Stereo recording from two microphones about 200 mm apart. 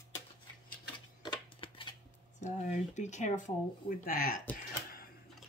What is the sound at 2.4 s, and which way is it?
Speech, 35° left (ahead or behind).